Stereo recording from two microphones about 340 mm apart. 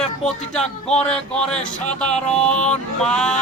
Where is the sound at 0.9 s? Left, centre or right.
Centre.